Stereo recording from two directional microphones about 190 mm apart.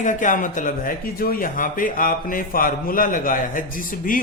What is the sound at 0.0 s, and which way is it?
A man's voice, 40° left (ahead or behind).